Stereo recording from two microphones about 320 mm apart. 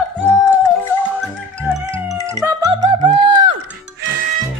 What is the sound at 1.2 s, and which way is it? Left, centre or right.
Music, centre.